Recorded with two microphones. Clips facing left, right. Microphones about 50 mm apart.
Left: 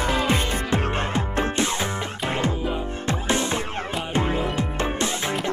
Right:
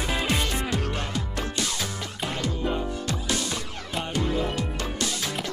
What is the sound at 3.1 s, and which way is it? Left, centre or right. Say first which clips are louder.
Music: left 5 dB; left.